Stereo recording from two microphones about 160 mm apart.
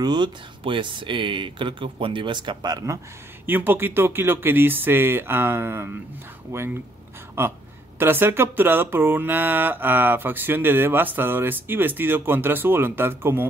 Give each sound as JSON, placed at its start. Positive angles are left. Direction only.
{"t": 0.0, "sound": "speech", "side_deg": -30}
{"t": 3.4, "sound": "speech", "side_deg": -10}